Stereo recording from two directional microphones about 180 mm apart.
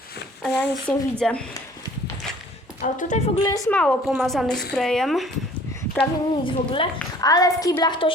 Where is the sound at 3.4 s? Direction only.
20° left (ahead or behind).